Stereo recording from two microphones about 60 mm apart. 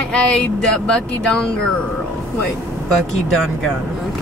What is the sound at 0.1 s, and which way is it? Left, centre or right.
Speech, centre.